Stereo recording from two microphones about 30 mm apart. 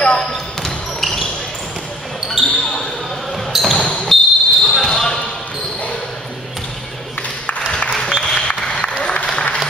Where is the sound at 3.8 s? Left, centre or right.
Left.